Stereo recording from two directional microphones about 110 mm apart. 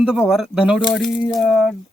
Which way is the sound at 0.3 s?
5° right (ahead or behind).